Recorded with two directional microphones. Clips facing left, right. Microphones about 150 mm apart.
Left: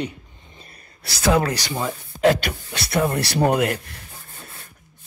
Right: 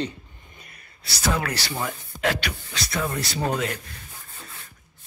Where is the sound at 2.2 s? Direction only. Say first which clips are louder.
Left 8 dB; 50° left (ahead or behind).